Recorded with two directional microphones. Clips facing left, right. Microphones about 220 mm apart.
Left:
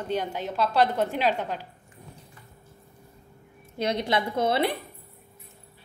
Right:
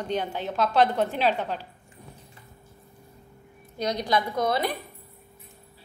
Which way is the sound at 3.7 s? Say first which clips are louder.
Even; 25° left (ahead or behind).